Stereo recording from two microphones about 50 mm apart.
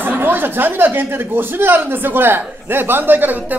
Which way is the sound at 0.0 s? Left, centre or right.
Right.